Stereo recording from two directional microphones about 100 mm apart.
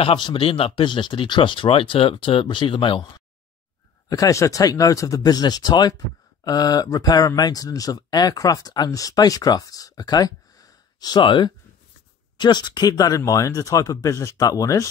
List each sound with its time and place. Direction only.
0.0 s speech: 60° left (ahead or behind)
4.1 s speech: 35° left (ahead or behind)